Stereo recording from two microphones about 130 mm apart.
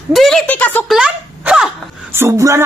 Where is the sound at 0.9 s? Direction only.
5° right (ahead or behind).